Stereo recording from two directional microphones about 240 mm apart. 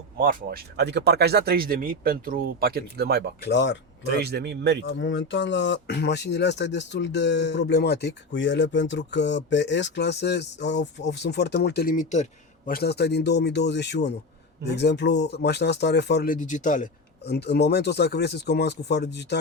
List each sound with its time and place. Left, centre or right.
0.2 s speech: right
3.4 s speech: left
4.0 s speech: right
4.9 s speech: left